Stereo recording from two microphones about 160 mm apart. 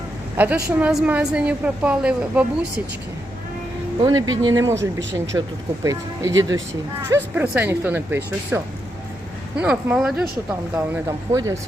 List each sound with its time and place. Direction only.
0.3 s a woman's voice: 10° right (ahead or behind)
4.0 s a woman's voice: 25° right (ahead or behind); by 10.2 s 5° right (ahead or behind)
10.9 s a woman's voice: 20° right (ahead or behind)